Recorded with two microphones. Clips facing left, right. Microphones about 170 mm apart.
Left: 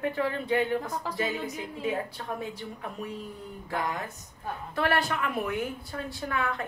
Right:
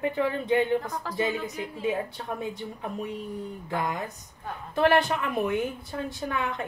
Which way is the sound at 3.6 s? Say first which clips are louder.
Right 1 dB; 15° right (ahead or behind).